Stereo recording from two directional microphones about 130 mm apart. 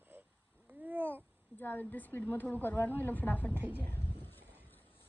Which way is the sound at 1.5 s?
15° left (ahead or behind).